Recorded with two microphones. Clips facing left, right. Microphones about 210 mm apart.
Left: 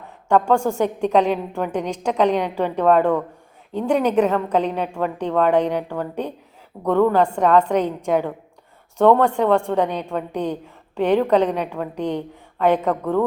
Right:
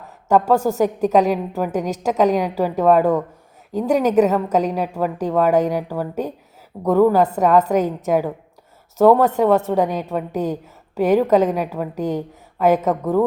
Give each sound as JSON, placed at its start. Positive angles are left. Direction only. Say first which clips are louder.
{"t": 0.3, "sound": "a woman's voice", "louder": "right 1 dB", "side_deg": -5}